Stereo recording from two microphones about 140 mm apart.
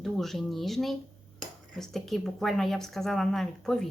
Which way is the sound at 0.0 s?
Centre (ahead or behind).